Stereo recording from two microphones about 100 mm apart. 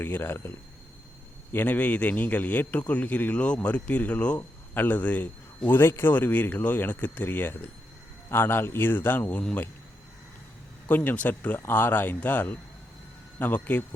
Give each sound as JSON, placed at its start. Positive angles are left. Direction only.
{"t": 0.0, "sound": "speech", "side_deg": 20}
{"t": 1.5, "sound": "a man's voice", "side_deg": 15}
{"t": 10.8, "sound": "speech", "side_deg": 15}